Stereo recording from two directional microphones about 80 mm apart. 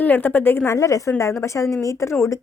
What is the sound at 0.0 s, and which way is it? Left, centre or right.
A woman's voice, left.